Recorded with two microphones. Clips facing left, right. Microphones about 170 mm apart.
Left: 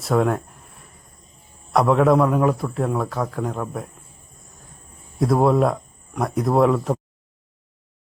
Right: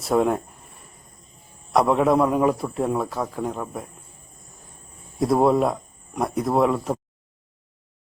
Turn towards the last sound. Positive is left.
turn(degrees=0)  # may be behind; listen again after turning